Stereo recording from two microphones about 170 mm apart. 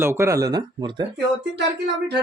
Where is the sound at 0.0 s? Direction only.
15° right (ahead or behind).